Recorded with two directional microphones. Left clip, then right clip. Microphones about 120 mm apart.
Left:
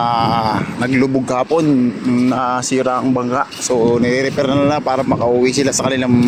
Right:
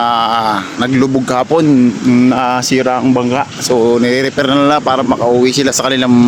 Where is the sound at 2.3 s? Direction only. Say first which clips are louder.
Right 4 dB; 50° right (ahead or behind).